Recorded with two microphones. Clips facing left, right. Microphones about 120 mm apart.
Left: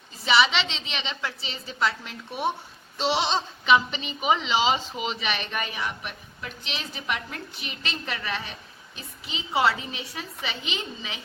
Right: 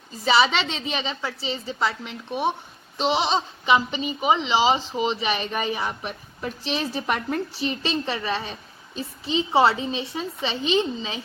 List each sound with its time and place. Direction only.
0.3 s a woman's voice: 40° right (ahead or behind)